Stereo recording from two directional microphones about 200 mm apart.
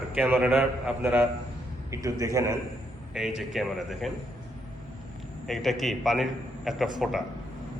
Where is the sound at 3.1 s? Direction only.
5° right (ahead or behind).